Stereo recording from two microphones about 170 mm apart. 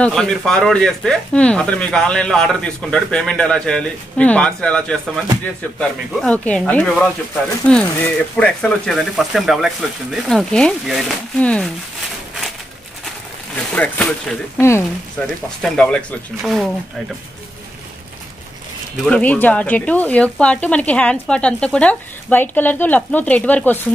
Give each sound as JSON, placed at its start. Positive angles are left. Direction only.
{"t": 0.0, "sound": "speech", "side_deg": 5}
{"t": 13.7, "sound": "speech", "side_deg": 5}
{"t": 19.0, "sound": "speech", "side_deg": 10}